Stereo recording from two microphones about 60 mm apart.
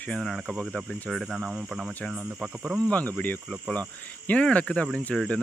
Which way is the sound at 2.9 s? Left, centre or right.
Left.